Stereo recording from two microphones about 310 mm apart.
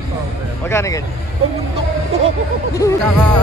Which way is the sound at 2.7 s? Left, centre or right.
Centre.